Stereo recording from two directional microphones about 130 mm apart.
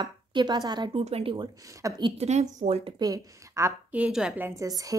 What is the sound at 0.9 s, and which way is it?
Speech, 50° right (ahead or behind).